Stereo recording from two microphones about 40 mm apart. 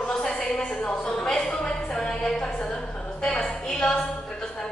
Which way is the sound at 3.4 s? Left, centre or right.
Centre.